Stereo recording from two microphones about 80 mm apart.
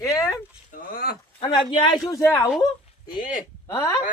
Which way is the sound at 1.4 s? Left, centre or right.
Left.